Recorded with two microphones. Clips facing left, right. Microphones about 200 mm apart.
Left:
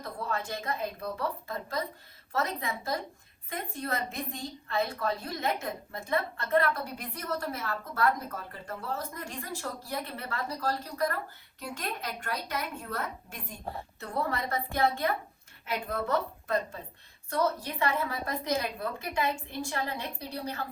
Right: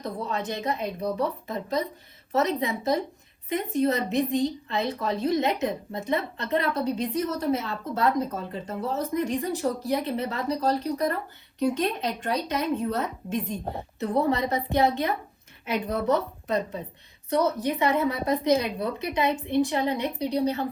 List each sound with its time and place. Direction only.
0.0 s a woman's voice: 20° right (ahead or behind)